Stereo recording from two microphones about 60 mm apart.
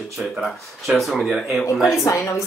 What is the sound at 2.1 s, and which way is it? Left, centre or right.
Speech, left.